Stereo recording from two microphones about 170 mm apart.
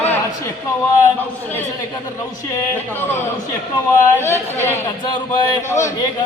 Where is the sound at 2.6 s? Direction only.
15° left (ahead or behind).